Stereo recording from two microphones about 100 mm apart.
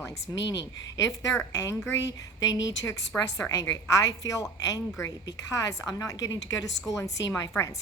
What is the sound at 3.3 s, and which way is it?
A woman's voice, 30° left (ahead or behind).